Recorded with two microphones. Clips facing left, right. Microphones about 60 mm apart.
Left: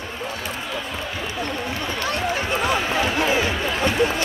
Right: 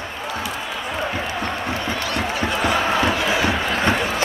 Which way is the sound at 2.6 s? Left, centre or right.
Right.